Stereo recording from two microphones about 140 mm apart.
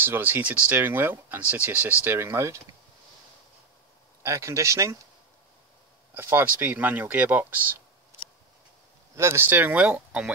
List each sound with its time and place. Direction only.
0.0 s speech: 15° right (ahead or behind)
4.2 s speech: 20° right (ahead or behind)
6.1 s speech: 15° right (ahead or behind)